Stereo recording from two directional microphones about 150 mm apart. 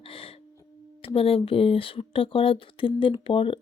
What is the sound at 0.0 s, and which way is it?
Gasp, 40° left (ahead or behind).